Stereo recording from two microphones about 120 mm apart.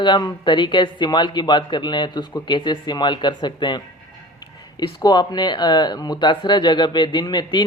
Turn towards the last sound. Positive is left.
turn(degrees=40)  # may be behind; listen again after turning